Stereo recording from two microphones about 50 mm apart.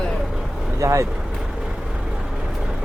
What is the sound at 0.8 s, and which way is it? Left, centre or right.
Speech, right.